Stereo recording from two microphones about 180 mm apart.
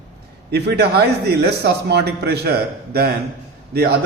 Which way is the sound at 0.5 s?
65° right (ahead or behind).